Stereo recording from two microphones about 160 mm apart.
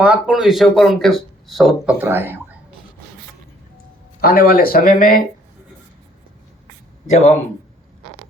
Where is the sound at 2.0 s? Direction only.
15° right (ahead or behind).